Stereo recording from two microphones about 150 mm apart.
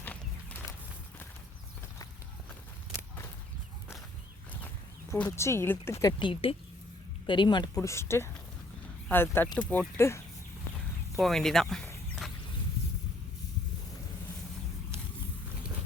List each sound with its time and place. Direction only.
0.0 s walk: 10° left (ahead or behind)
5.1 s speech: 15° left (ahead or behind); by 7.7 s 30° left (ahead or behind)
7.8 s speech: 15° left (ahead or behind)
11.2 s speech: centre (ahead or behind)